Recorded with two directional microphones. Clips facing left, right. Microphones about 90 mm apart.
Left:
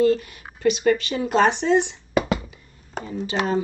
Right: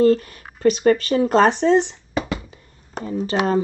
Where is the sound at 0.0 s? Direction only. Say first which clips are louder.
Right 3 dB; 40° right (ahead or behind).